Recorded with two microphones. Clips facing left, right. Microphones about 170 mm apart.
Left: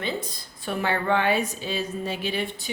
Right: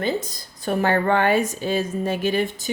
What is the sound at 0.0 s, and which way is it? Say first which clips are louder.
A woman's voice: right 6 dB; 45° right (ahead or behind).